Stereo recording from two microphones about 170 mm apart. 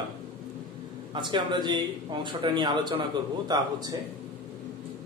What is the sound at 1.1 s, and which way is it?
A man's voice, 25° right (ahead or behind).